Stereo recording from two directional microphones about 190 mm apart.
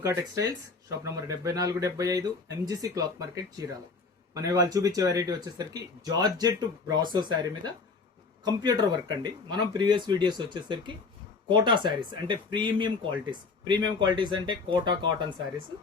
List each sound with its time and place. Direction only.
0.0 s speech: 15° right (ahead or behind)